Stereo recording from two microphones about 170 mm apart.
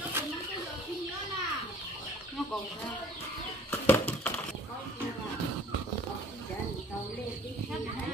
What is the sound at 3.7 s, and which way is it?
Bird flight, 10° left (ahead or behind).